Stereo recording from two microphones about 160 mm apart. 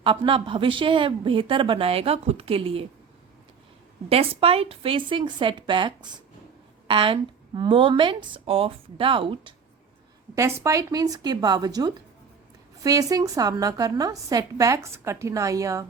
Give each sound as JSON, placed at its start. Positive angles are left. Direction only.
{"t": 0.0, "sound": "a woman's voice", "side_deg": -30}
{"t": 4.1, "sound": "a woman's voice", "side_deg": -35}
{"t": 10.3, "sound": "a woman's voice", "side_deg": -20}